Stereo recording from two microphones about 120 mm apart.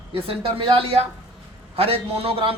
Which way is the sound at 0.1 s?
50° right (ahead or behind).